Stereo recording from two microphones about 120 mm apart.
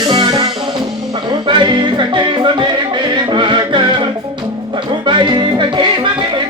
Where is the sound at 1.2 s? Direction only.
40° right (ahead or behind).